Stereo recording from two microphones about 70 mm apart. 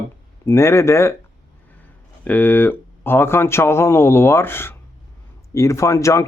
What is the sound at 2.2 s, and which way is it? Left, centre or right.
Speech, left.